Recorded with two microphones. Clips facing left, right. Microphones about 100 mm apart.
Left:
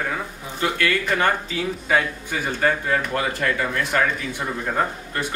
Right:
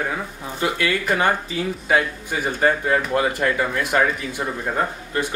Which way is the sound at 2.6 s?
20° right (ahead or behind).